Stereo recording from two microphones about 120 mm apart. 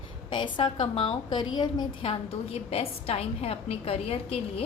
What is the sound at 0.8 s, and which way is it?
Speech, 50° left (ahead or behind).